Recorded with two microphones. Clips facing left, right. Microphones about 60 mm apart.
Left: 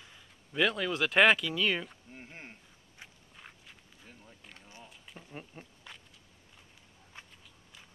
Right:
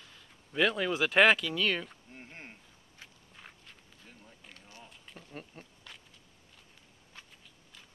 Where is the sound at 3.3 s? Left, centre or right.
Centre.